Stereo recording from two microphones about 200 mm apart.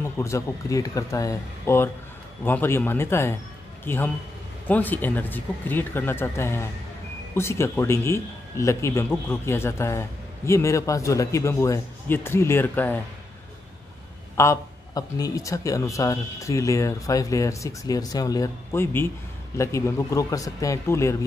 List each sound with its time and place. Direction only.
0.0 s a man's voice: 15° left (ahead or behind)
14.3 s a man's voice: 15° left (ahead or behind)